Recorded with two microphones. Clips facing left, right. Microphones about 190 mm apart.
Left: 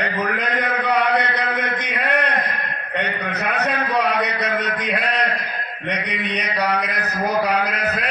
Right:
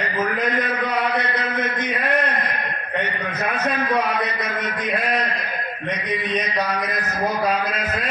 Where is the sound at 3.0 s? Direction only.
65° left (ahead or behind).